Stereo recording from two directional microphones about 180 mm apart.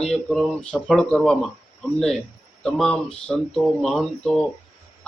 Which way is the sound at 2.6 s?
5° left (ahead or behind).